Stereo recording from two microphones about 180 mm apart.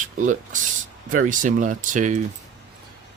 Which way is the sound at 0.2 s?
45° right (ahead or behind).